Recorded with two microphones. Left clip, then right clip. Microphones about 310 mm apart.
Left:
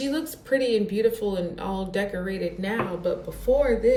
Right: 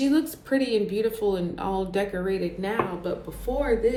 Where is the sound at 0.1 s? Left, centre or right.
Centre.